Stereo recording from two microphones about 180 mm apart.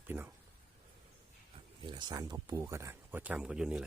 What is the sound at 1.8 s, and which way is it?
Speech, 25° right (ahead or behind).